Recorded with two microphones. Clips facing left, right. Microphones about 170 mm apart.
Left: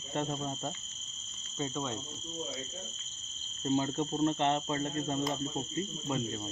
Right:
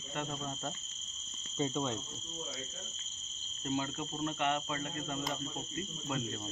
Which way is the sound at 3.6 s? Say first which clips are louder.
Left 6 dB; 25° left (ahead or behind).